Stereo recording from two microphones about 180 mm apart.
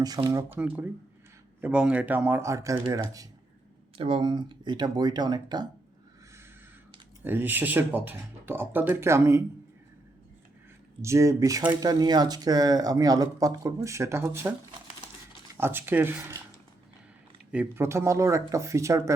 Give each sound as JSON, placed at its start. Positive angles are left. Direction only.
{"t": 0.3, "sound": "speech", "side_deg": -20}
{"t": 3.9, "sound": "speech", "side_deg": -30}
{"t": 7.3, "sound": "speech", "side_deg": -10}
{"t": 11.0, "sound": "speech", "side_deg": -15}
{"t": 15.5, "sound": "speech", "side_deg": -10}
{"t": 17.5, "sound": "speech", "side_deg": -10}